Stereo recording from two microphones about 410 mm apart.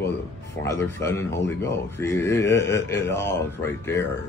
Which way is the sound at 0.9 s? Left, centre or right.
Centre.